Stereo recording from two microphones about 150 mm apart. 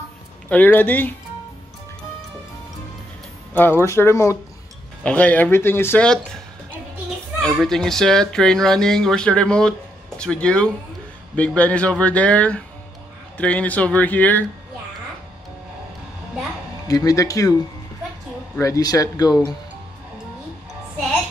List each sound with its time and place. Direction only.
0.5 s speech: 10° left (ahead or behind)
3.5 s speech: 15° left (ahead or behind)
7.5 s speech: 5° left (ahead or behind)
16.8 s speech: 25° left (ahead or behind)
18.6 s speech: 25° left (ahead or behind)